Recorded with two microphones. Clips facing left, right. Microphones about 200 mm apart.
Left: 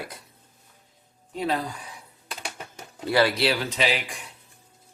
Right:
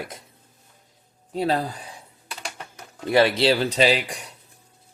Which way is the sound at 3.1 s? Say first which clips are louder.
Right 4 dB; 25° right (ahead or behind).